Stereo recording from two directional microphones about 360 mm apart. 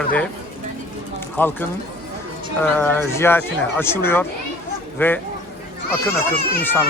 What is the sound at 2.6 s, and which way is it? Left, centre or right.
Speech, centre.